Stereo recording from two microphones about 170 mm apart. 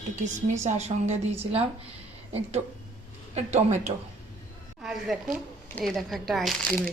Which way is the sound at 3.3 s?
40° right (ahead or behind).